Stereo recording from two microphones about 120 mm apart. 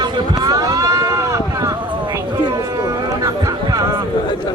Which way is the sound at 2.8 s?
25° right (ahead or behind).